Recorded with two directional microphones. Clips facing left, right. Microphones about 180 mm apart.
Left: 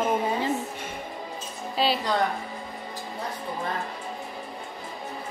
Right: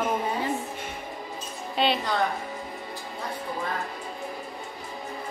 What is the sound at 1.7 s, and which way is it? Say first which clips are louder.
Speech: even; centre (ahead or behind).